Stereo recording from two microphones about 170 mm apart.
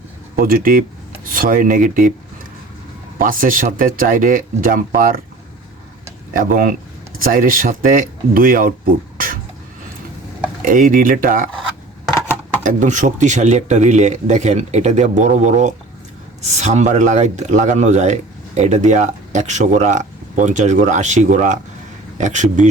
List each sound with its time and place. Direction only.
0.3 s speech: 55° right (ahead or behind)
3.2 s speech: 55° right (ahead or behind)
6.3 s speech: 55° right (ahead or behind)
10.6 s speech: 55° right (ahead or behind)
12.6 s speech: 45° right (ahead or behind)